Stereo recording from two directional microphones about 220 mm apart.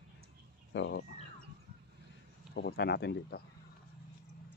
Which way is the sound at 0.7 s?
55° left (ahead or behind).